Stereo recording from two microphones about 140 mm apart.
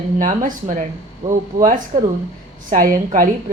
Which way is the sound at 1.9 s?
30° right (ahead or behind).